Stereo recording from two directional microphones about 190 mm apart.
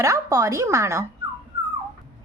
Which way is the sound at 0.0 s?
15° right (ahead or behind).